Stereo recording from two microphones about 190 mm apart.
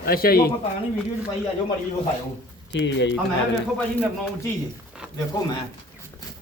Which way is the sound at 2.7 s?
70° left (ahead or behind).